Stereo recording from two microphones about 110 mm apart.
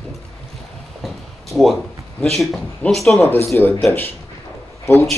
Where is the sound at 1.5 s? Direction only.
Centre (ahead or behind).